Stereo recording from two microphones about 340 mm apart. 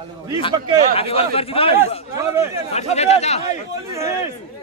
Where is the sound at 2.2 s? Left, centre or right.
Centre.